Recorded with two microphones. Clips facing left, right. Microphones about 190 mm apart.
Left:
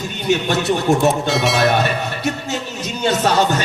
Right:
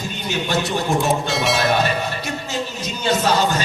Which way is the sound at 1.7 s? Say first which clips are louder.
Left 1 dB; 60° left (ahead or behind).